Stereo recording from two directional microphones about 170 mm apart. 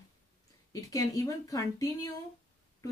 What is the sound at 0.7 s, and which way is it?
Speech, 20° left (ahead or behind).